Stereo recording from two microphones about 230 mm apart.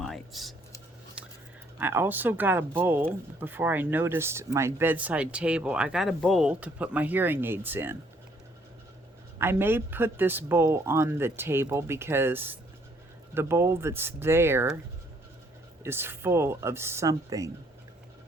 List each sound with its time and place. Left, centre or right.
0.0 s a sound: centre
1.8 s speech: centre
9.4 s speech: centre
15.8 s speech: centre